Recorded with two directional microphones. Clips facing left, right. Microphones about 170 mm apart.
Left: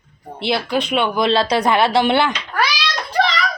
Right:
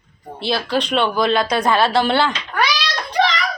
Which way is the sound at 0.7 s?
10° left (ahead or behind).